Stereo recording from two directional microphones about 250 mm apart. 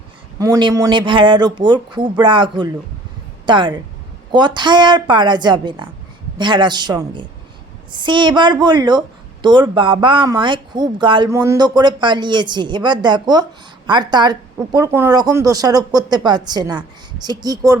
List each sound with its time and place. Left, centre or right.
0.3 s a woman's voice: centre